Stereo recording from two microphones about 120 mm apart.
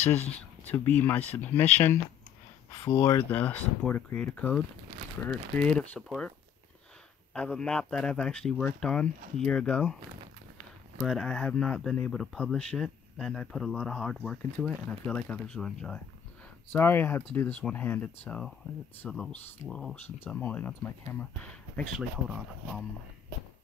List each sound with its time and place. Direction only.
0.3 s speech: 10° left (ahead or behind)
2.9 s speech: 30° left (ahead or behind)
3.3 s speech: 10° left (ahead or behind)
7.3 s speech: 5° left (ahead or behind)
11.0 s speech: 5° left (ahead or behind)
16.7 s speech: 15° left (ahead or behind)
19.0 s speech: 5° left (ahead or behind)
20.4 s speech: 15° left (ahead or behind)